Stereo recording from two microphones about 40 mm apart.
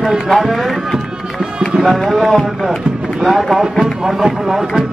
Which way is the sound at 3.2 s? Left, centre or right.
Centre.